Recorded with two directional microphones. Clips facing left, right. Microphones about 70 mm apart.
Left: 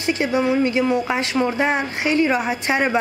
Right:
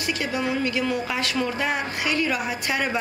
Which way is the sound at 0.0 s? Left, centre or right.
Left.